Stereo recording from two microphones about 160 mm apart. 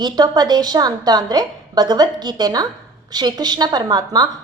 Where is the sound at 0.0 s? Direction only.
25° right (ahead or behind).